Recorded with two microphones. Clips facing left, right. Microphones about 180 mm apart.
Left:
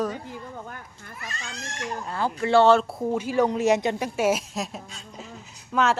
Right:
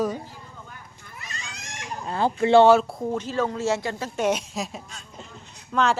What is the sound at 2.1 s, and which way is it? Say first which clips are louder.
Speech: right 4 dB; 25° right (ahead or behind).